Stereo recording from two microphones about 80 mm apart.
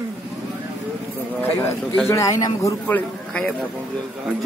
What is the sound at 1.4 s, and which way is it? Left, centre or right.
A man's voice, left.